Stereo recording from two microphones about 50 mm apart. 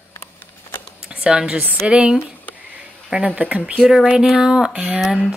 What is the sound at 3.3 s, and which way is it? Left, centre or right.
Speech, right.